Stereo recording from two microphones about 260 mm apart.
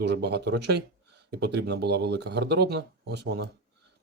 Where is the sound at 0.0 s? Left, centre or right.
Right.